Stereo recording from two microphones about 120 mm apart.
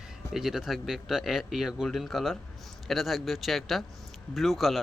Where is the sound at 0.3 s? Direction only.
5° right (ahead or behind).